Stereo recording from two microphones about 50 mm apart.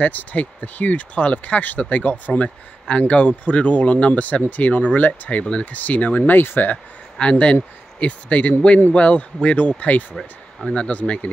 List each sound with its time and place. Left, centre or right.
0.0 s speech: left
5.4 s speech: left
7.2 s speech: left